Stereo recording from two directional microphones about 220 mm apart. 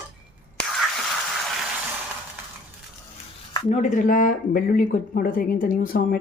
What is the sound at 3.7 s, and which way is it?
Speech, 35° left (ahead or behind).